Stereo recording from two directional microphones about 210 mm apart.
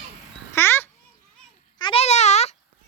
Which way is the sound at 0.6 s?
10° left (ahead or behind).